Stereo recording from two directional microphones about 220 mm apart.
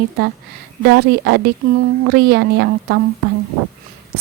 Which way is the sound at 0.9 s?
50° right (ahead or behind).